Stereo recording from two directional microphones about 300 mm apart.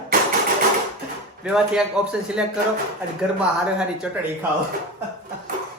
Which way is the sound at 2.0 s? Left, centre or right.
Centre.